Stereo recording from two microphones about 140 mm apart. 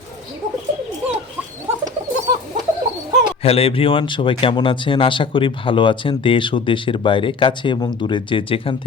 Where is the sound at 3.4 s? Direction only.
45° left (ahead or behind).